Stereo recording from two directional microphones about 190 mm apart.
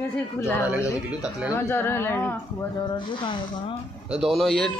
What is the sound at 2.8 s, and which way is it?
Speech, 25° left (ahead or behind).